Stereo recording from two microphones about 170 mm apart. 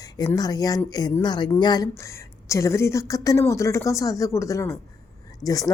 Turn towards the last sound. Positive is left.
turn(degrees=20)  # may be behind; listen again after turning